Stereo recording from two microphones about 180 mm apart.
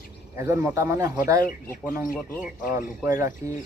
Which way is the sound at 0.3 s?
15° right (ahead or behind).